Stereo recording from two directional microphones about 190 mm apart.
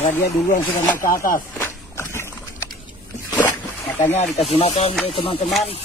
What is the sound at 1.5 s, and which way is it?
Biting, 10° left (ahead or behind).